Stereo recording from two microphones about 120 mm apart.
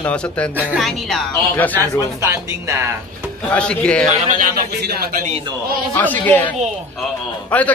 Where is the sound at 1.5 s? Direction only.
15° left (ahead or behind).